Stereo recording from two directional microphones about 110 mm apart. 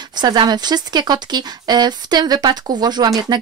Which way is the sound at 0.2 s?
40° right (ahead or behind).